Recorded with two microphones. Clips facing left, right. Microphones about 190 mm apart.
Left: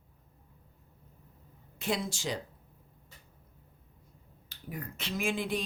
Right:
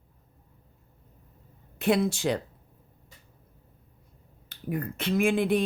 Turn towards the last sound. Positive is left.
turn(degrees=-60)  # may be behind; listen again after turning